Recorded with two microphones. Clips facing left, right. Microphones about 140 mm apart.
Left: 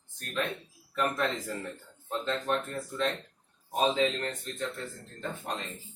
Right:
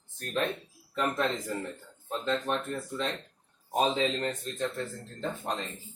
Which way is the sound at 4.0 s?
30° right (ahead or behind).